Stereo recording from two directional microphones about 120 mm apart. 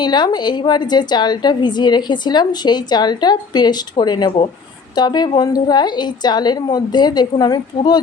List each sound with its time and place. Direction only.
0.0 s a woman's voice: 35° left (ahead or behind)